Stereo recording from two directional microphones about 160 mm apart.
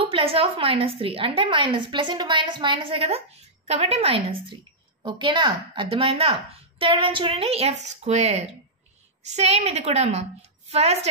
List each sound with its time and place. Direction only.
0.0 s a woman's voice: 35° right (ahead or behind)